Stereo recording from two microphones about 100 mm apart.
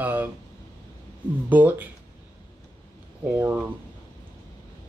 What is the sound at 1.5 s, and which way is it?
Speech, 15° right (ahead or behind).